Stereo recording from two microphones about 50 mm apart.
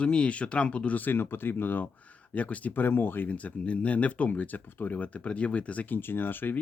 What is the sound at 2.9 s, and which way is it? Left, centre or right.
Speech, left.